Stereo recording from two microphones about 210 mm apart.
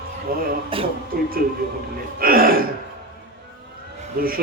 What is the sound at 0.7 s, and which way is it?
Speech, 25° right (ahead or behind).